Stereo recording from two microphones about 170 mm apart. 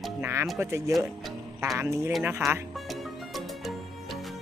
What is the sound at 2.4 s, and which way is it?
Music, centre (ahead or behind).